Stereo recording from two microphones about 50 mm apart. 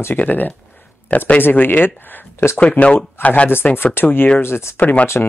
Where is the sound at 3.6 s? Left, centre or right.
Left.